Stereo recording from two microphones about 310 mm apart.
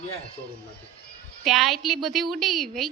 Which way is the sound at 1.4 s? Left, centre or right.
Centre.